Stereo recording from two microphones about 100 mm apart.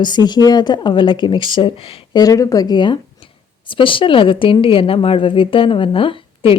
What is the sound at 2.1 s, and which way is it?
A woman's voice, 35° left (ahead or behind).